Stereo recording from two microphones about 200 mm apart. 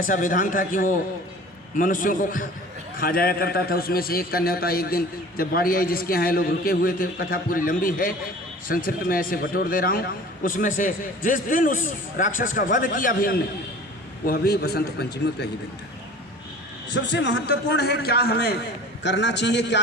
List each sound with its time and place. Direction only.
0.0 s a man's voice: 40° left (ahead or behind)
16.9 s a man's voice: 60° left (ahead or behind)